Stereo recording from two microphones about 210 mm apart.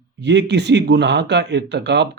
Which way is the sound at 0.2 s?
55° right (ahead or behind).